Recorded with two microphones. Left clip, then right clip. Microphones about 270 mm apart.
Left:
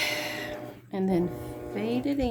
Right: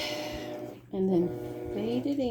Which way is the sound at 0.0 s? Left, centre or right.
Centre.